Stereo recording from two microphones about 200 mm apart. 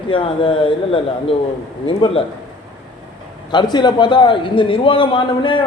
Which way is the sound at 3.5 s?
20° left (ahead or behind).